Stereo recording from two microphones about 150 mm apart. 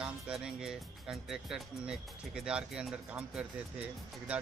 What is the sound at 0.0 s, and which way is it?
Speech, 5° right (ahead or behind).